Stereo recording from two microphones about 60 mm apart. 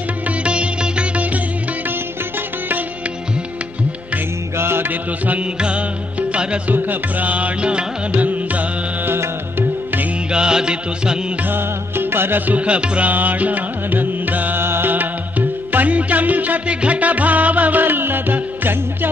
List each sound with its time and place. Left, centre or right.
0.4 s music: centre
4.6 s mantra: right
5.6 s music: centre
9.1 s music: right
10.3 s music: centre
11.4 s music: right